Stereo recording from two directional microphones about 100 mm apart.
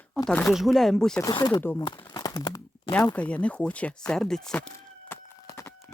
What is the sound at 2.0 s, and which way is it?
Crumpling, 40° left (ahead or behind).